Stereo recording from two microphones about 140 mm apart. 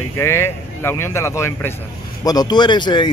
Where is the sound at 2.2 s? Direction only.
30° left (ahead or behind).